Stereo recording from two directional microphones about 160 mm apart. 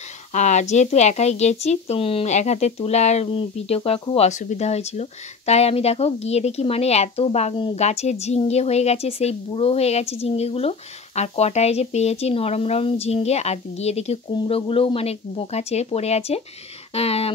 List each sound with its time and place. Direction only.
0.3 s speech: 45° left (ahead or behind)